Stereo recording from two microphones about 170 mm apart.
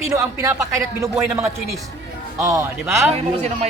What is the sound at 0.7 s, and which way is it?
A man's voice, 15° right (ahead or behind).